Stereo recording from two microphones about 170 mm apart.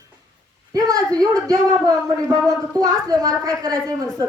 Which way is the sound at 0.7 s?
20° right (ahead or behind).